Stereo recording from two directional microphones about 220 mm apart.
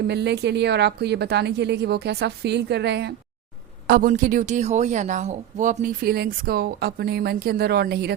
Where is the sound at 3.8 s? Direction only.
40° right (ahead or behind).